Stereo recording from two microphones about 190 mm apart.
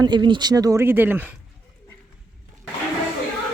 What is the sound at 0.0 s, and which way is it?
Speech, 20° right (ahead or behind).